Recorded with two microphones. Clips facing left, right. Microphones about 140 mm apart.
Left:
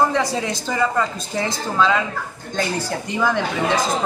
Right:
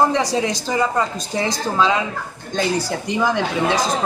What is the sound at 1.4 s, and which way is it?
Speech, 15° right (ahead or behind).